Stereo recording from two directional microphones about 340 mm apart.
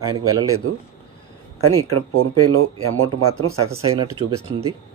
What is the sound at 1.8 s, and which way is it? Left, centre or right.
Speech, right.